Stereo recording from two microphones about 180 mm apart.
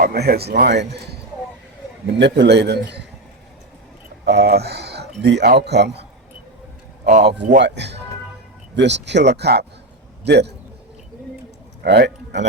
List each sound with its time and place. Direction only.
0.0 s a man's voice: 60° right (ahead or behind)
4.3 s speech: 65° right (ahead or behind)
7.0 s speech: 40° right (ahead or behind)
7.6 s speech: 75° right (ahead or behind)
11.8 s speech: 65° right (ahead or behind)